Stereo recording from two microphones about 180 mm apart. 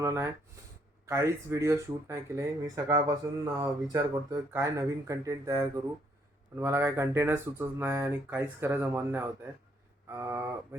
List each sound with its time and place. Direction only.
0.0 s speech: 15° right (ahead or behind)